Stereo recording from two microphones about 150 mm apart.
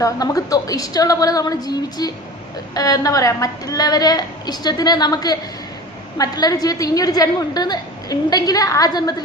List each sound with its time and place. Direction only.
0.0 s a woman's voice: 25° left (ahead or behind)